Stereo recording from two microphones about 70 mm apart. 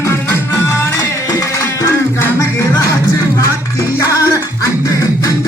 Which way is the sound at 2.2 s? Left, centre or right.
Left.